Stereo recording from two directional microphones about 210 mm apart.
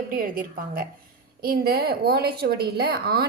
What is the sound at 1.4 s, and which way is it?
A woman's voice, 45° right (ahead or behind).